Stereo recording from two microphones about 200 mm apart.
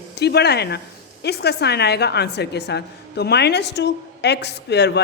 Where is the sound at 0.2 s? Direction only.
55° left (ahead or behind).